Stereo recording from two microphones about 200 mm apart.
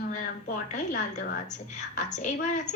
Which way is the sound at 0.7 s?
40° left (ahead or behind).